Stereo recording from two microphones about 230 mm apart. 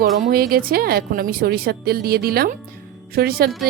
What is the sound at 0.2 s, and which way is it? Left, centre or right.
Speech, right.